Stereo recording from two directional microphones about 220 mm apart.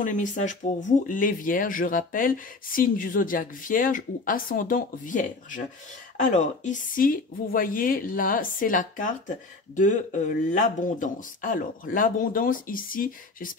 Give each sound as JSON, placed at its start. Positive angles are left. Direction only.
{"t": 0.0, "sound": "speech", "side_deg": 35}